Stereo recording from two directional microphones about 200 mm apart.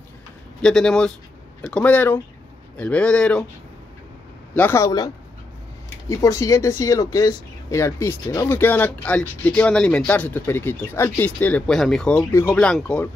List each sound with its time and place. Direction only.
0.6 s speech: 5° left (ahead or behind)
4.6 s speech: 10° left (ahead or behind)